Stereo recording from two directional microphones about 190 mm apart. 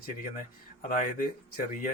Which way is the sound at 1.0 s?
45° left (ahead or behind).